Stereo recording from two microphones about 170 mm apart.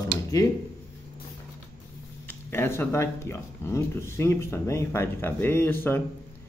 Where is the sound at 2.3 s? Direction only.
15° left (ahead or behind).